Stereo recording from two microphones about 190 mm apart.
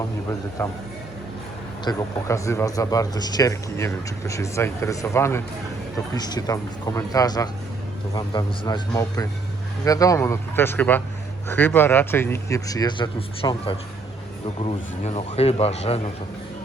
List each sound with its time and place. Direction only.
1.8 s a man's voice: 20° left (ahead or behind); by 16.1 s 35° left (ahead or behind)